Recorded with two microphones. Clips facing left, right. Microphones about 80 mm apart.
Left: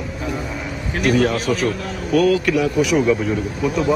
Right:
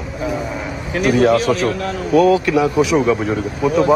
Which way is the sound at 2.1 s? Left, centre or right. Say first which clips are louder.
Right 3 dB; right.